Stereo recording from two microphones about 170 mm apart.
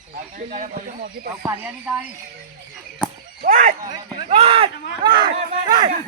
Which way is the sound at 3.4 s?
45° right (ahead or behind).